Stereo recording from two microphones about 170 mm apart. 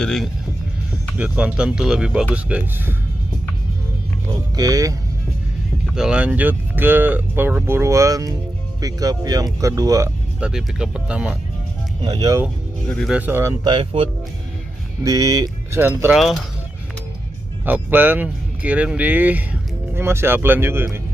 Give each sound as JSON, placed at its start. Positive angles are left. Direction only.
{"t": 0.0, "sound": "speech", "side_deg": 5}
{"t": 1.1, "sound": "speech", "side_deg": -10}
{"t": 4.3, "sound": "speech", "side_deg": -20}
{"t": 5.9, "sound": "speech", "side_deg": -5}
{"t": 10.4, "sound": "speech", "side_deg": -5}
{"t": 12.0, "sound": "speech", "side_deg": -25}
{"t": 12.8, "sound": "speech", "side_deg": 5}
{"t": 13.1, "sound": "speech", "side_deg": -10}
{"t": 13.7, "sound": "speech", "side_deg": -30}
{"t": 17.6, "sound": "speech", "side_deg": -10}